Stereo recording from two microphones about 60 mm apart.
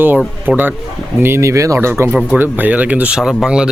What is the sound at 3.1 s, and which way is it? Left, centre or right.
Speech, centre.